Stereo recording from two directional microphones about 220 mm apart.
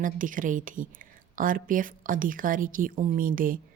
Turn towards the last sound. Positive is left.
turn(degrees=-40)  # may be behind; listen again after turning